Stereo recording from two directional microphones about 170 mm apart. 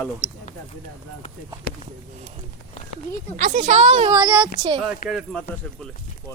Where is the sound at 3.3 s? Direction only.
45° right (ahead or behind).